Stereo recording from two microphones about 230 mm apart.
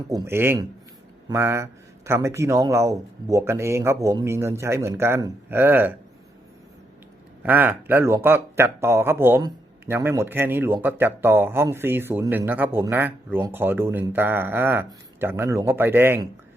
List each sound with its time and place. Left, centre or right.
0.1 s speech: centre
7.4 s speech: centre